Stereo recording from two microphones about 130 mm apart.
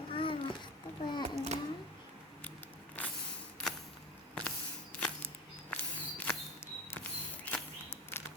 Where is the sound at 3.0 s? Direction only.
10° left (ahead or behind).